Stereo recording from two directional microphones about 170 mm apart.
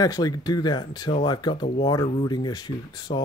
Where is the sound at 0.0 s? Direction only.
20° left (ahead or behind).